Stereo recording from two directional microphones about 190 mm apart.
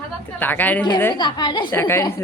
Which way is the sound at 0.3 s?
10° left (ahead or behind).